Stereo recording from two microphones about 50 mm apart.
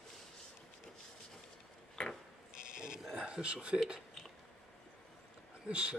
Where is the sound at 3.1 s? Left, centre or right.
Centre.